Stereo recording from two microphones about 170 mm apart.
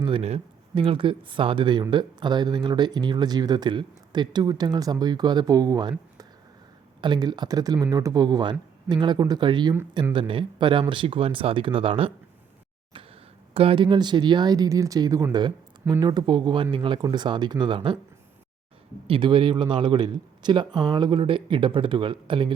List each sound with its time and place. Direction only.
0.0 s speech: 35° right (ahead or behind)
7.0 s speech: 25° right (ahead or behind)
13.5 s speech: 35° right (ahead or behind)
19.0 s speech: 30° right (ahead or behind)